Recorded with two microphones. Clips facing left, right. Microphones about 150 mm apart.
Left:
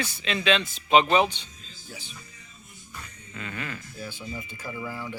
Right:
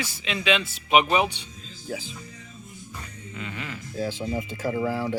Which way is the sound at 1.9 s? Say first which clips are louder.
Right 11 dB; 90° right.